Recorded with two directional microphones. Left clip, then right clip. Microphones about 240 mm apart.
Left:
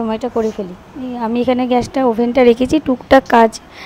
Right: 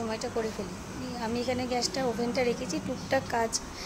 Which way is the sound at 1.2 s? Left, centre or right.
Left.